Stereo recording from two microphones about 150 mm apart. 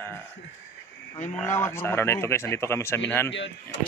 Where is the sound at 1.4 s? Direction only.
15° left (ahead or behind).